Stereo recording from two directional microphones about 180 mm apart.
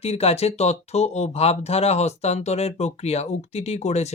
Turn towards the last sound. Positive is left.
turn(degrees=40)  # may be behind; listen again after turning